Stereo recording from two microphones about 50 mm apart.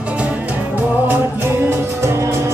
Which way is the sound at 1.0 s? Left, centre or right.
Right.